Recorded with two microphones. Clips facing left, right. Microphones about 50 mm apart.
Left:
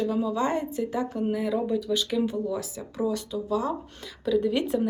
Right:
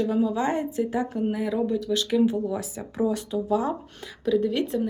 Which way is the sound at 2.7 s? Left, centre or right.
Right.